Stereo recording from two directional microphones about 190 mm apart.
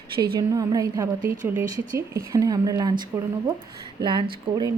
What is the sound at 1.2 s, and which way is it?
Speech, 45° right (ahead or behind).